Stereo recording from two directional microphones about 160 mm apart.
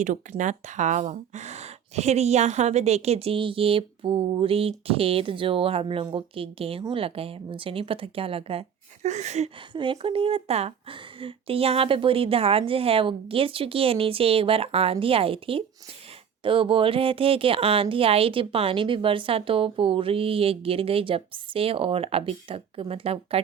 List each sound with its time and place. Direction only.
0.0 s speech: 50° right (ahead or behind); by 8.6 s 35° right (ahead or behind)
9.0 s a sound: 45° right (ahead or behind)
9.7 s speech: 30° right (ahead or behind)